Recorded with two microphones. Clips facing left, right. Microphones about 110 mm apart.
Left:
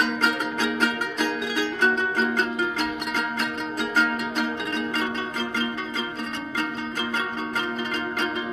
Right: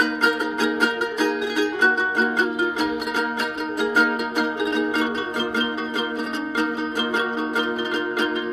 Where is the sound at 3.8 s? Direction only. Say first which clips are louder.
Right 4 dB; 10° right (ahead or behind).